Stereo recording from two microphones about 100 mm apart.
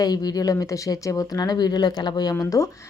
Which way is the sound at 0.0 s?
40° left (ahead or behind).